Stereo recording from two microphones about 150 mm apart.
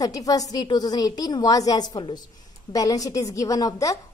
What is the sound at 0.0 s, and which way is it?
A woman's voice, 25° left (ahead or behind).